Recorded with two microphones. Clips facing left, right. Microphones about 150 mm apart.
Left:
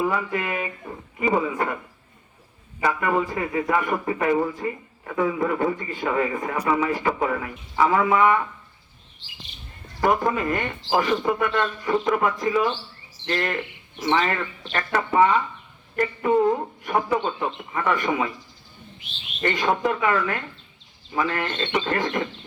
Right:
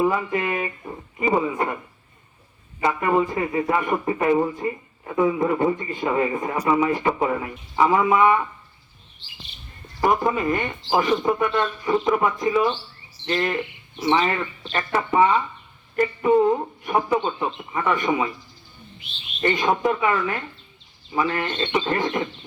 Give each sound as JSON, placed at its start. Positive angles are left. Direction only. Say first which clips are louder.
{"t": 0.0, "sound": "a man's voice", "louder": "right 3 dB", "side_deg": -25}
{"t": 2.8, "sound": "a man's voice", "louder": "right 2 dB", "side_deg": -25}
{"t": 10.0, "sound": "a man's voice", "louder": "right 1 dB", "side_deg": -15}
{"t": 19.4, "sound": "a man's voice", "louder": "right 2 dB", "side_deg": -20}